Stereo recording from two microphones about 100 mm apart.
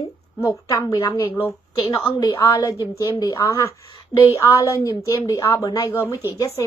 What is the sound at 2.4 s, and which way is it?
A woman's voice, 30° left (ahead or behind).